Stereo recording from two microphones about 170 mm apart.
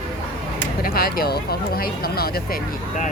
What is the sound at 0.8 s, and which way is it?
Speech, 60° left (ahead or behind).